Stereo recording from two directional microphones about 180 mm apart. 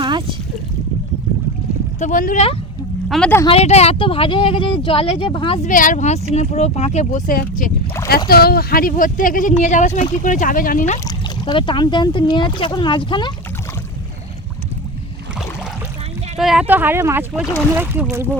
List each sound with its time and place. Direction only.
0.0 s a sound: 25° right (ahead or behind)
2.0 s speech: 45° left (ahead or behind)
3.1 s speech: 10° left (ahead or behind)
3.4 s speech: 35° left (ahead or behind)
5.6 s speech: 45° left (ahead or behind)
11.0 s speech: 25° left (ahead or behind)
16.4 s speech: 5° right (ahead or behind)